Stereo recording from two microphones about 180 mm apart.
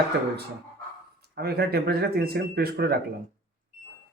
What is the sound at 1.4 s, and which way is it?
Speech, 60° right (ahead or behind).